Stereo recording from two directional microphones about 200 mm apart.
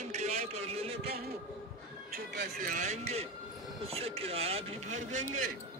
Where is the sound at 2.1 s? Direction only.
50° right (ahead or behind).